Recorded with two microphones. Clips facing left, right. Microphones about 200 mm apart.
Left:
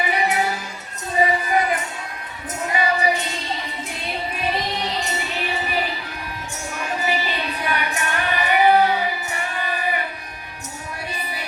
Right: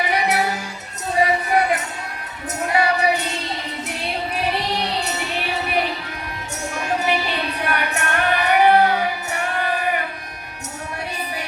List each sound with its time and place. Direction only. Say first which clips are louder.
0.1 s music: right 1 dB; 80° right
4.8 s music: right 1 dB; 70° right (ahead or behind)
7.0 s music: right 2 dB; 70° right (ahead or behind)